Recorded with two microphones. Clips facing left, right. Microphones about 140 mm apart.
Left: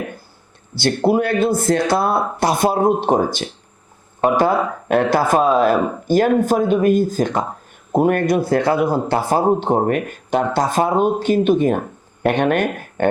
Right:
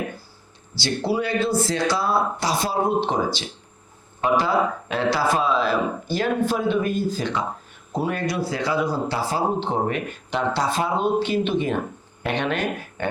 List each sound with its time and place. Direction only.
0.8 s speech: 55° left (ahead or behind)